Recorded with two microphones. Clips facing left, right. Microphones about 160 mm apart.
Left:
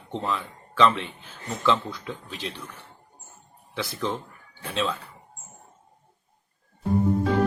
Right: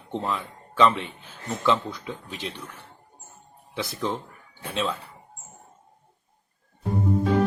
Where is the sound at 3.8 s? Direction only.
20° right (ahead or behind).